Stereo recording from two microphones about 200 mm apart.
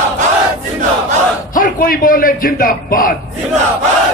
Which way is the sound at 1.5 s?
45° left (ahead or behind).